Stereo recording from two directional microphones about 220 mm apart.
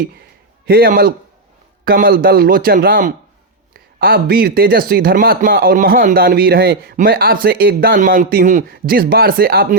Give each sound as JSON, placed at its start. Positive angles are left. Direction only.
{"t": 0.6, "sound": "speech", "side_deg": -45}